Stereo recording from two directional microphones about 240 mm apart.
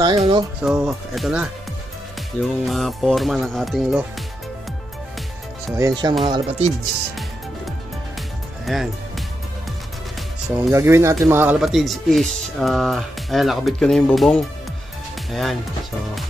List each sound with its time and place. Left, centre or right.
0.2 s speech: centre
0.6 s speech: centre
5.8 s speech: centre
8.7 s speech: centre
10.5 s speech: centre